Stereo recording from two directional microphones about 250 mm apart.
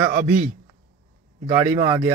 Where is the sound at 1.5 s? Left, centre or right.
Centre.